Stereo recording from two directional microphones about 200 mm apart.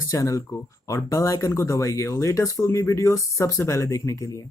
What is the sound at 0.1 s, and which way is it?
Speech, 15° left (ahead or behind).